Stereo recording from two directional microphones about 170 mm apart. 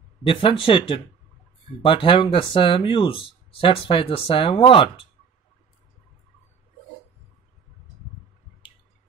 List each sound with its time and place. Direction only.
0.2 s speech: 30° left (ahead or behind)